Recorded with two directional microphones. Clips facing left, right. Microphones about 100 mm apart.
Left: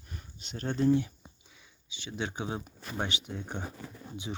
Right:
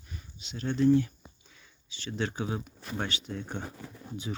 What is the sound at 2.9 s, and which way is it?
Speech, 15° left (ahead or behind).